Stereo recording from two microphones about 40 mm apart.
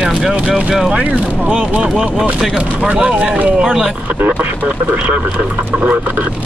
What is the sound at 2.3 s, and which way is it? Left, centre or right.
Music, right.